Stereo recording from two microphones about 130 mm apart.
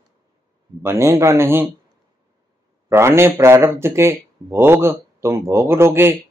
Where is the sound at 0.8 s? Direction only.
20° right (ahead or behind).